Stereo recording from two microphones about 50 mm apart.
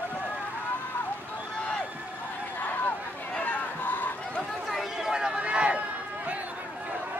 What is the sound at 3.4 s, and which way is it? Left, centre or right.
Chatter, left.